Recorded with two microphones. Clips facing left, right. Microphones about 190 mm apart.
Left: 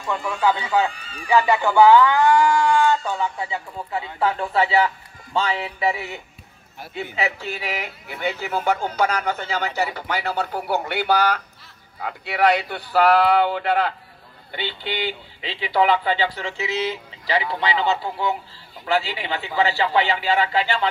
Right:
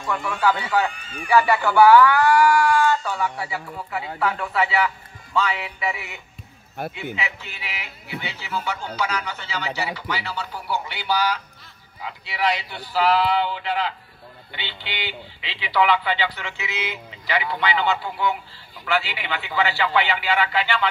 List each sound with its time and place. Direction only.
0.1 s speech: 20° left (ahead or behind)
7.2 s speech: 40° left (ahead or behind)